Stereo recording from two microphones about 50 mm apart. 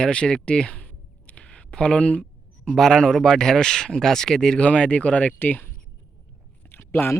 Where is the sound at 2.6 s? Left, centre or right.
Centre.